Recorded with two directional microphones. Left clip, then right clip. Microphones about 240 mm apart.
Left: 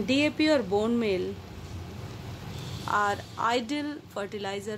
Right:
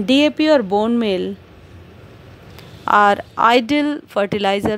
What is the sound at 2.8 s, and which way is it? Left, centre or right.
A woman's voice, right.